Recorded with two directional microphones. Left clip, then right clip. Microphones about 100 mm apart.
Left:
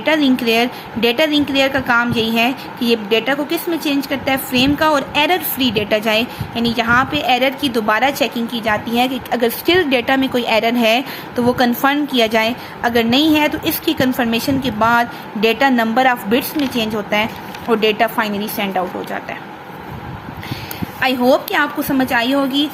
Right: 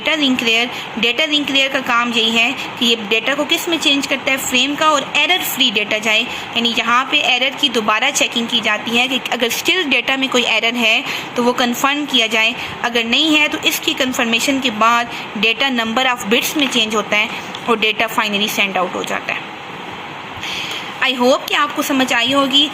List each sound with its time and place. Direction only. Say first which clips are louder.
0.0 s speech: even; 40° left (ahead or behind)
4.5 s a woman's voice: even; 45° left (ahead or behind)
9.3 s a woman's voice: left 1 dB; 20° left (ahead or behind)
21.0 s speech: even; 30° left (ahead or behind)